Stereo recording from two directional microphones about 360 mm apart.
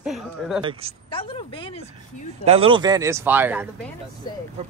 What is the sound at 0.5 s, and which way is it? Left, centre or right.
Speech, centre.